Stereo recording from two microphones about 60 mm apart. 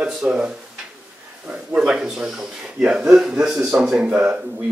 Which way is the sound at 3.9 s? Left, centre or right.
Centre.